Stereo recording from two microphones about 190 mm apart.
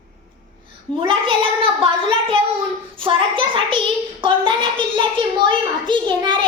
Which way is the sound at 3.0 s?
25° right (ahead or behind).